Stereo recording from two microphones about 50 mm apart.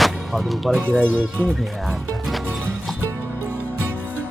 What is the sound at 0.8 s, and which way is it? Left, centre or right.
Speech, left.